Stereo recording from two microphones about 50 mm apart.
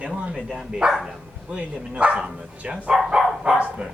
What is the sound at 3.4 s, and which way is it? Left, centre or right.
Dog, right.